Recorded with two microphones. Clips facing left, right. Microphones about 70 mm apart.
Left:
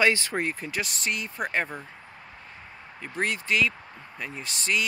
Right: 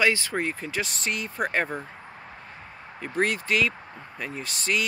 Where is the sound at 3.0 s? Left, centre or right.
Centre.